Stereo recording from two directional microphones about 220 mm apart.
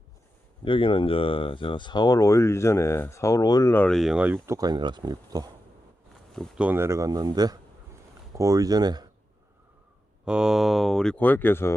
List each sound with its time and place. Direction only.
0.6 s speech: 25° left (ahead or behind); by 5.5 s 20° right (ahead or behind)
6.3 s speech: centre (ahead or behind); by 9.0 s 20° right (ahead or behind)
10.2 s speech: 5° right (ahead or behind)